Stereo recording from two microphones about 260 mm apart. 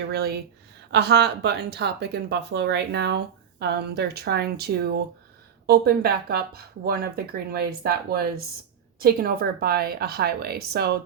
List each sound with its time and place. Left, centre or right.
0.1 s speech: right